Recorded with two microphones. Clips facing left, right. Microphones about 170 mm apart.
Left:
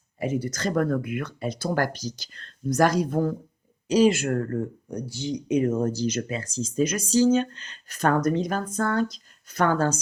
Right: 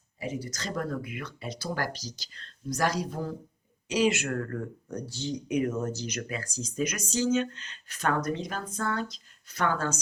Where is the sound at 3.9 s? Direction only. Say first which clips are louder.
Left 6 dB; 35° left (ahead or behind).